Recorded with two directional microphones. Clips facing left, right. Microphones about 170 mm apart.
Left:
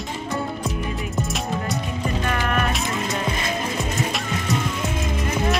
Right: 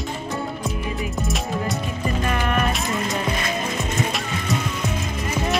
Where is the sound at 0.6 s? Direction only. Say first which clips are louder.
Even; centre (ahead or behind).